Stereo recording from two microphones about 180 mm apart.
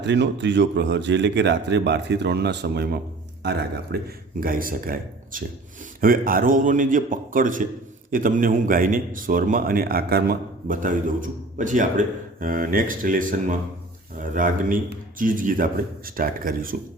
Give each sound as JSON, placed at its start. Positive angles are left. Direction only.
{"t": 0.0, "sound": "speech", "side_deg": -80}
{"t": 4.4, "sound": "a man's voice", "side_deg": -50}